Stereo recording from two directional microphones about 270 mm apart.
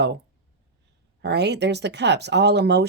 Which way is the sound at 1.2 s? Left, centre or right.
Right.